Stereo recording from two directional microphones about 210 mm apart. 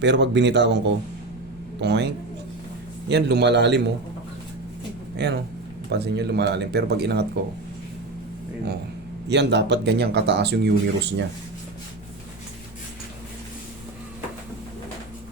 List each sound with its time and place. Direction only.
0.0 s speech: 55° right (ahead or behind)
3.1 s speech: 55° right (ahead or behind)
5.1 s speech: 55° right (ahead or behind)
9.3 s speech: 55° right (ahead or behind)